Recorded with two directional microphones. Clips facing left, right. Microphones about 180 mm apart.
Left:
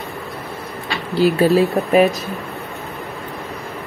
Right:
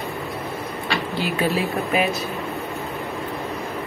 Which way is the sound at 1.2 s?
35° left (ahead or behind).